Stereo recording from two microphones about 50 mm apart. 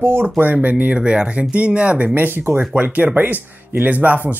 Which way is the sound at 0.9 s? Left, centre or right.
Right.